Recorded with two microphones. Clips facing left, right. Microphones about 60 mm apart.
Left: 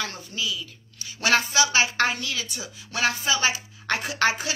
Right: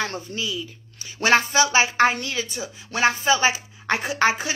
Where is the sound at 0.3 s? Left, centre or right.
Right.